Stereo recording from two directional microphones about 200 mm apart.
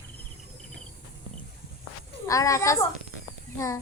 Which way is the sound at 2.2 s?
15° left (ahead or behind).